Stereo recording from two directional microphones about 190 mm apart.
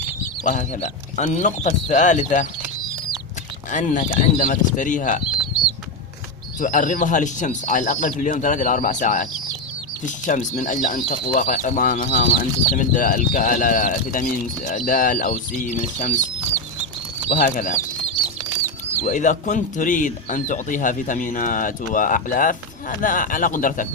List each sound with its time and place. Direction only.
0.4 s speech: 40° left (ahead or behind)
3.7 s speech: 40° left (ahead or behind)
6.6 s speech: 45° left (ahead or behind)
10.2 s speech: 40° left (ahead or behind)
17.3 s speech: 40° left (ahead or behind)
19.0 s speech: 40° left (ahead or behind)